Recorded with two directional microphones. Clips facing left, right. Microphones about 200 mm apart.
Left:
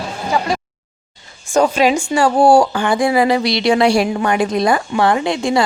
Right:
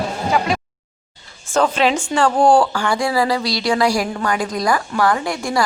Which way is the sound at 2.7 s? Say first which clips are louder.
Left 4 dB; 20° left (ahead or behind).